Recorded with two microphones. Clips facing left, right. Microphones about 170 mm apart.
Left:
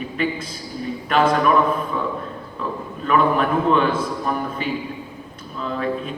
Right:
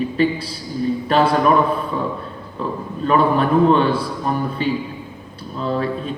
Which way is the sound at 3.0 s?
35° right (ahead or behind).